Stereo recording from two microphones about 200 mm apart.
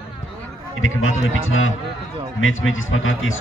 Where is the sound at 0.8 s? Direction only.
80° left.